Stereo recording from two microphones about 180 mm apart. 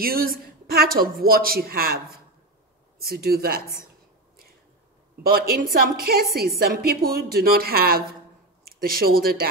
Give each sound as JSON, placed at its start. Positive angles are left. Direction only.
{"t": 0.0, "sound": "a woman's voice", "side_deg": -55}
{"t": 5.2, "sound": "a woman's voice", "side_deg": -55}